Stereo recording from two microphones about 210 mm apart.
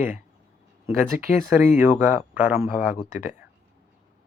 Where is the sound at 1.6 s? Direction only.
10° right (ahead or behind).